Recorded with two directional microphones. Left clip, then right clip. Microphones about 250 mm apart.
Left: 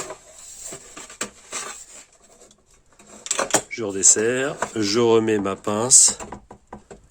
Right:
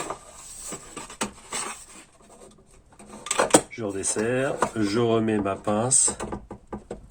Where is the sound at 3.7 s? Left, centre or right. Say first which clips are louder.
Left 9 dB; left.